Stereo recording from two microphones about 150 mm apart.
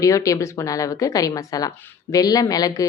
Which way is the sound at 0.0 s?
20° left (ahead or behind).